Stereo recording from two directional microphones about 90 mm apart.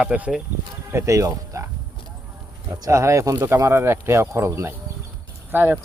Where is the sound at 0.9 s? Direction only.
30° right (ahead or behind).